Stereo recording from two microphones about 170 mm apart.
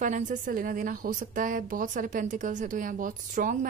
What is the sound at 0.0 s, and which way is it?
A woman's voice, 50° right (ahead or behind).